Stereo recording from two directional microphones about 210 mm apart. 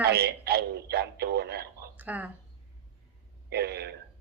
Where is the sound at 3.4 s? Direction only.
50° right (ahead or behind).